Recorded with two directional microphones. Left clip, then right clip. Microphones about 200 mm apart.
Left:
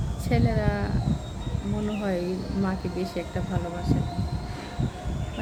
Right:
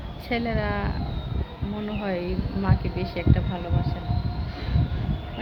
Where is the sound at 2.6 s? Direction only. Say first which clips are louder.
Right 1 dB; 5° left (ahead or behind).